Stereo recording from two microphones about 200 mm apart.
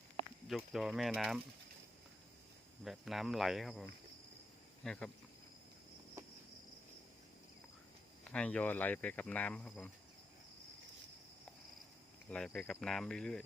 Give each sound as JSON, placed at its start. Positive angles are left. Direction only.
{"t": 0.4, "sound": "cricket", "side_deg": 0}
{"t": 2.8, "sound": "cricket", "side_deg": 0}
{"t": 8.2, "sound": "speech", "side_deg": 5}
{"t": 12.3, "sound": "cricket", "side_deg": 5}